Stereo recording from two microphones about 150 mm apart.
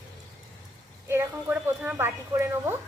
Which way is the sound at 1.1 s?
15° right (ahead or behind).